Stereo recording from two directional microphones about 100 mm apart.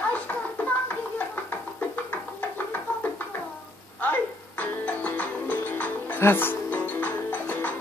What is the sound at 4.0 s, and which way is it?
Music, 15° left (ahead or behind).